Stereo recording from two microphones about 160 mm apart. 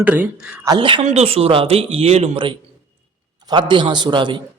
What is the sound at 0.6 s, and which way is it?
A man's voice, 30° right (ahead or behind).